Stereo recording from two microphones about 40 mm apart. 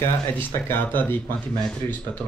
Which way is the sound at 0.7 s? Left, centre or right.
Left.